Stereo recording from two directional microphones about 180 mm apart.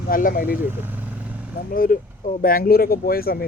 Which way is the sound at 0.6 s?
10° right (ahead or behind).